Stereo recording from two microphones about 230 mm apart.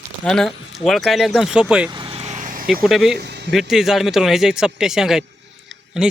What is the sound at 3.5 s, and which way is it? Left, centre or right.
Speech, centre.